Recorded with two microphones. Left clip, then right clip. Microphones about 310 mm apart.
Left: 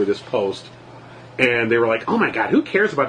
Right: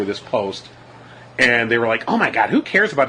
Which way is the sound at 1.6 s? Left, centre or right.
Right.